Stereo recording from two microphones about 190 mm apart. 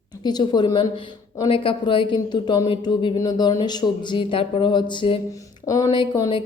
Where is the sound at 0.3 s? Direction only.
20° left (ahead or behind).